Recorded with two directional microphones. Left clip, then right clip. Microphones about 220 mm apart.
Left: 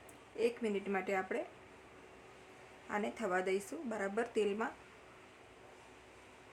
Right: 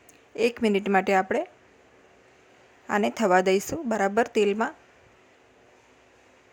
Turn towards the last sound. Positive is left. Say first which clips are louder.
# right 12 dB
turn(degrees=-35)  # may be behind; listen again after turning